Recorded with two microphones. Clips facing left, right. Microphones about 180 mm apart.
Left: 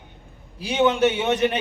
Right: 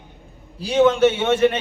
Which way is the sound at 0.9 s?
15° left (ahead or behind).